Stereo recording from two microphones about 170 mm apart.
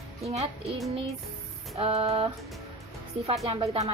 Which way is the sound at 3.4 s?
35° right (ahead or behind).